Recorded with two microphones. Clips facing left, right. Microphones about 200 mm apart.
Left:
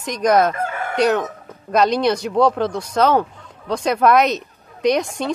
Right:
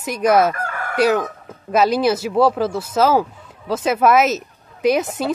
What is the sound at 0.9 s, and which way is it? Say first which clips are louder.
A woman's voice: right 1 dB; 5° right (ahead or behind).